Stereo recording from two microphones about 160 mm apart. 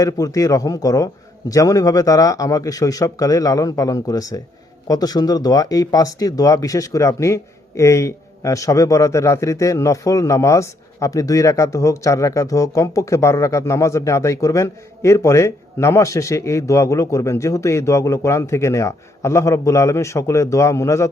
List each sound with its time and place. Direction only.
0.0 s speech: 20° left (ahead or behind)